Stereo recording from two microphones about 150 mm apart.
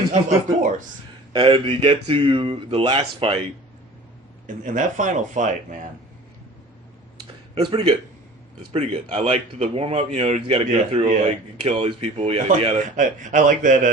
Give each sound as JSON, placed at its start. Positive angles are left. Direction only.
{"t": 1.3, "sound": "speech", "side_deg": -35}
{"t": 4.4, "sound": "speech", "side_deg": -60}
{"t": 7.5, "sound": "speech", "side_deg": -30}
{"t": 12.5, "sound": "speech", "side_deg": -40}
{"t": 13.0, "sound": "speech", "side_deg": -60}